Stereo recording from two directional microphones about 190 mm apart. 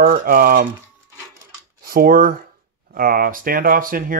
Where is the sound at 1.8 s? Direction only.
50° right (ahead or behind).